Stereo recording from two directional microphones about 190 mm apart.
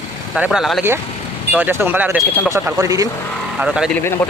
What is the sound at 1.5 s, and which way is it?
Speech, 10° right (ahead or behind).